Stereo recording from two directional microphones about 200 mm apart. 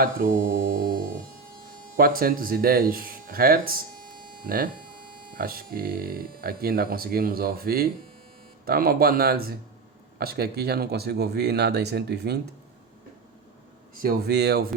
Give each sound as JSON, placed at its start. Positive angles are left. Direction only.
{"t": 0.0, "sound": "mains hum", "side_deg": -45}
{"t": 2.0, "sound": "speech", "side_deg": -45}
{"t": 14.0, "sound": "speech", "side_deg": -50}